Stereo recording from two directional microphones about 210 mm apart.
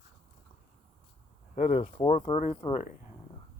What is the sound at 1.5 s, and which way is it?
Speech, 35° left (ahead or behind).